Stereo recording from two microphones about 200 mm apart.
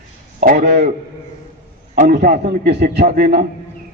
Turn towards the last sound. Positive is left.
turn(degrees=-45)  # may be behind; listen again after turning